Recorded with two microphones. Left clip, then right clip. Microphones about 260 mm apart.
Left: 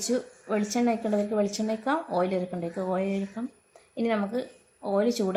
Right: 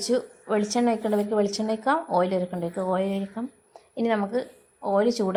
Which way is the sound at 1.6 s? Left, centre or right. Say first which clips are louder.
Right 4 dB; centre.